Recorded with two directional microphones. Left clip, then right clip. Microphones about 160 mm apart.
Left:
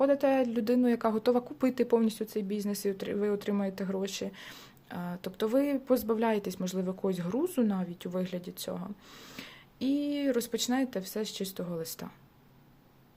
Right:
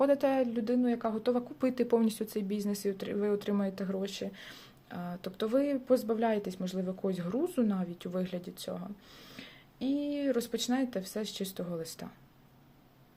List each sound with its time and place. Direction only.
0.0 s a woman's voice: centre (ahead or behind)
0.3 s speech: 20° left (ahead or behind)